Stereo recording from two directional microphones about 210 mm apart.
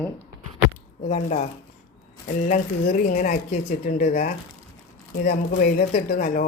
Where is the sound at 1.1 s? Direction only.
35° left (ahead or behind).